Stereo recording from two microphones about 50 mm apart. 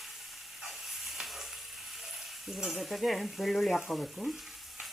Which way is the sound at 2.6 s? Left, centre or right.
Centre.